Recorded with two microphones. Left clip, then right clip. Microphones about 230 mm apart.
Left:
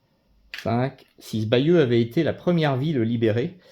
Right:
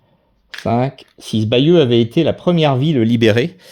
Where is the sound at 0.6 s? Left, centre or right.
Right.